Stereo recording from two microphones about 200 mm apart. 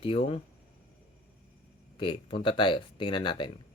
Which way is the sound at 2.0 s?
25° left (ahead or behind).